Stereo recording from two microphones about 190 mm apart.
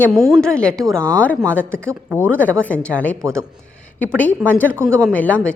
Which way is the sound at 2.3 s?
10° left (ahead or behind).